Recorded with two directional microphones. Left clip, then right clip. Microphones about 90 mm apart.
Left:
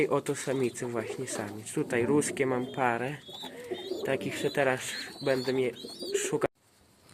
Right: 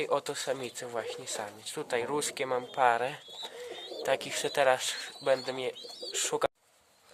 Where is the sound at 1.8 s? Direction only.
20° right (ahead or behind).